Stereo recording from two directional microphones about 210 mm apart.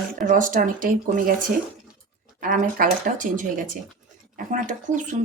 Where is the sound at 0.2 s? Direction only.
40° right (ahead or behind).